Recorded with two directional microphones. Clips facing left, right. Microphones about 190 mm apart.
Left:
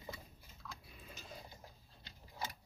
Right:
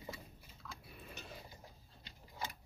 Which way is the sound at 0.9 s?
65° right (ahead or behind).